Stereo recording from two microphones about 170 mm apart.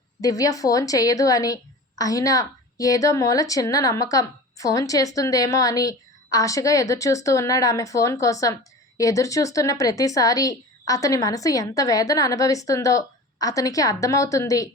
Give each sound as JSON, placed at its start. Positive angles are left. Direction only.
{"t": 0.2, "sound": "a woman's voice", "side_deg": 20}